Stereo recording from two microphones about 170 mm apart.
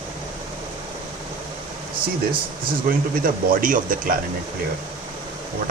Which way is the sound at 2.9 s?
55° right (ahead or behind).